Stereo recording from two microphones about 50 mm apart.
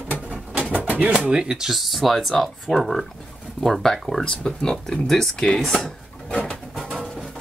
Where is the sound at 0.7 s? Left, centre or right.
Right.